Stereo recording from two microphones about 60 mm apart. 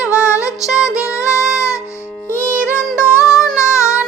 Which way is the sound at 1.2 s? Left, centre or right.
Left.